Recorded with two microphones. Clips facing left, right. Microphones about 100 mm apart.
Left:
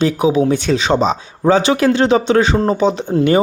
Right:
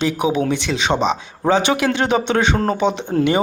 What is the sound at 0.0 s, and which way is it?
Speech, 35° left (ahead or behind).